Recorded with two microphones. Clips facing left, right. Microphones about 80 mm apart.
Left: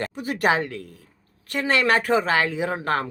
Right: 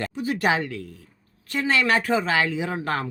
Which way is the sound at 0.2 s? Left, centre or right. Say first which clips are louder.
Left 1 dB; left.